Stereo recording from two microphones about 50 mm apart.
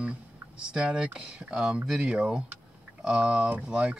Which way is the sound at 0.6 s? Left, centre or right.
Centre.